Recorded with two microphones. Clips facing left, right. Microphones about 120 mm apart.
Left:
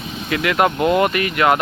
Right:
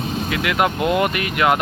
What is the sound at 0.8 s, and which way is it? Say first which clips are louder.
Speech: left 3 dB; 25° left (ahead or behind).